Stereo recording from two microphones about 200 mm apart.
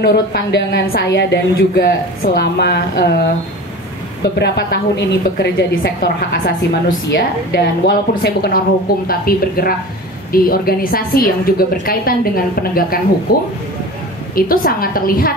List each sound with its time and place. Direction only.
0.0 s a woman's voice: 55° left (ahead or behind)
4.2 s a woman's voice: 55° left (ahead or behind)
13.3 s a woman's voice: 50° left (ahead or behind)